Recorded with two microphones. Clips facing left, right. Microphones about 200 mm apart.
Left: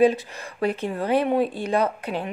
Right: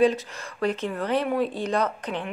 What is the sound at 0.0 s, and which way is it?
Speech, 10° left (ahead or behind).